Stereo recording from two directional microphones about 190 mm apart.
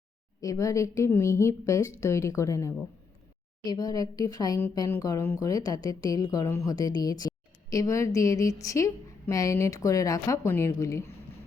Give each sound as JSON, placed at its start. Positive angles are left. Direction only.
{"t": 0.4, "sound": "speech", "side_deg": 15}